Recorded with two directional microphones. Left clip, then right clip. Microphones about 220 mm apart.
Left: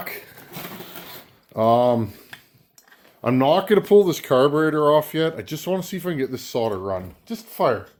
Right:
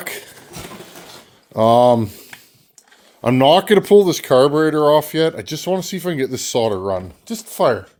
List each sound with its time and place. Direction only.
0.0 s speech: 40° right (ahead or behind)
1.5 s speech: 45° right (ahead or behind)